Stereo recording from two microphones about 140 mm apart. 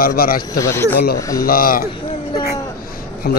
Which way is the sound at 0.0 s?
90° left.